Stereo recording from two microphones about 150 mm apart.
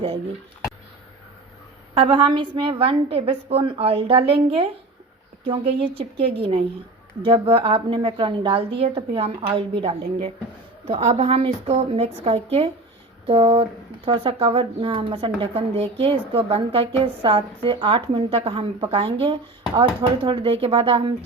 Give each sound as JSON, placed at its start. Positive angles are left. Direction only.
{"t": 2.0, "sound": "speech", "side_deg": -35}